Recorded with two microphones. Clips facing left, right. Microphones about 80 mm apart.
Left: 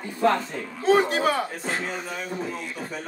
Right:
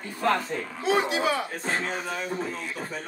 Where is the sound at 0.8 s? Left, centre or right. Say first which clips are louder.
Left 5 dB; left.